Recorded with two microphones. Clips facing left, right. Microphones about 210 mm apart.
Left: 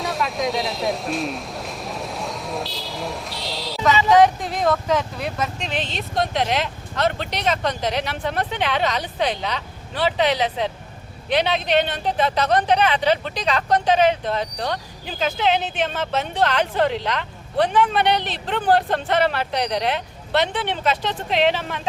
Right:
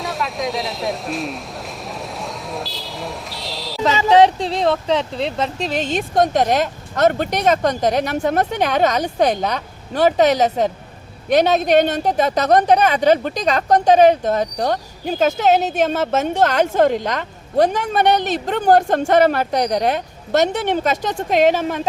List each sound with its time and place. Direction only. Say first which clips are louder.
0.0 s speech: even; centre (ahead or behind)
4.1 s speech: right 3 dB; 30° right (ahead or behind); by 21.8 s 45° right (ahead or behind)